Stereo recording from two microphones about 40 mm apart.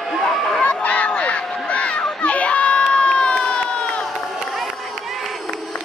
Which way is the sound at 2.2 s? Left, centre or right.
Left.